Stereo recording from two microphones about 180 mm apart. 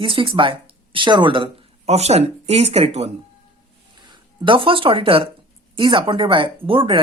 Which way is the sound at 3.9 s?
25° right (ahead or behind).